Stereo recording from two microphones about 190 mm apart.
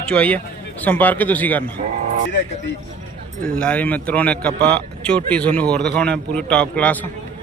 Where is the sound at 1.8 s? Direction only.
35° right (ahead or behind).